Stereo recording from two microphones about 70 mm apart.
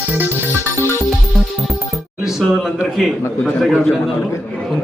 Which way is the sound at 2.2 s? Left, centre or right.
Centre.